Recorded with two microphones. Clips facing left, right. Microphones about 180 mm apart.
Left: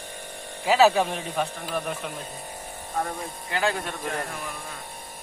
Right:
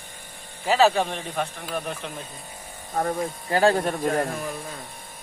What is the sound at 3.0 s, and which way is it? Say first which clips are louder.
Speech: right 5 dB; 40° right (ahead or behind).